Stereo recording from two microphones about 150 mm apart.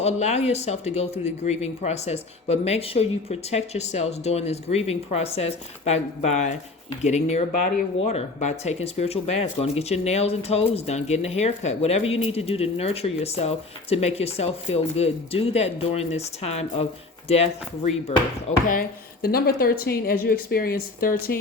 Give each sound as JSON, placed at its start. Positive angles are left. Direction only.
{"t": 0.0, "sound": "speech", "side_deg": 50}
{"t": 18.7, "sound": "a woman's voice", "side_deg": 80}